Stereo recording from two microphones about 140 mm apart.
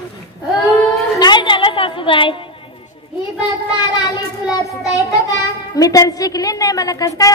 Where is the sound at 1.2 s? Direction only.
35° left (ahead or behind).